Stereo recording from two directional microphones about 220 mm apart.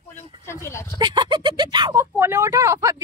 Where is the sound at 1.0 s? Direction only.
20° right (ahead or behind).